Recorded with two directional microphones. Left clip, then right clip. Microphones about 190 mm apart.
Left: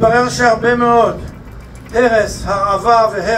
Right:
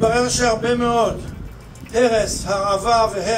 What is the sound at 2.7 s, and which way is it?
Speech, 15° left (ahead or behind).